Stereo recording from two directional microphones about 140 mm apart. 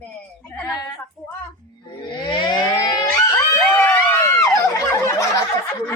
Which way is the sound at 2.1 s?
30° left (ahead or behind).